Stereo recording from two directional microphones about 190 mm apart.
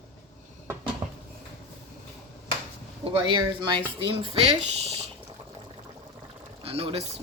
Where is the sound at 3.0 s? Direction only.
25° right (ahead or behind).